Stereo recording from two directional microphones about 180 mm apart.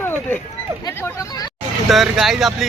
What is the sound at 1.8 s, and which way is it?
Speech, centre (ahead or behind).